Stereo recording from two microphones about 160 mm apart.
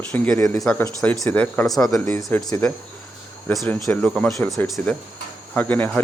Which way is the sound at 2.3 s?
10° left (ahead or behind).